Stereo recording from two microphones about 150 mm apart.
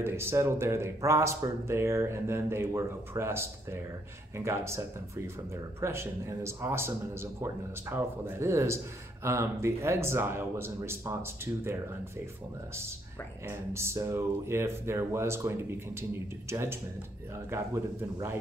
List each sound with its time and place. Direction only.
0.0 s speech: 15° right (ahead or behind)
13.5 s speech: 15° right (ahead or behind)